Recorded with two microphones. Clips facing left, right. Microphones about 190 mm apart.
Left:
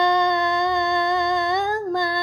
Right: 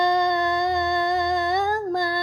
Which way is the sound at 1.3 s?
25° left (ahead or behind).